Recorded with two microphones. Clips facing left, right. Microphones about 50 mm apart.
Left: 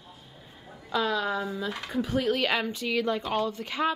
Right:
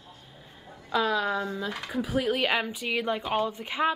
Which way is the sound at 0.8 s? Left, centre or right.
Centre.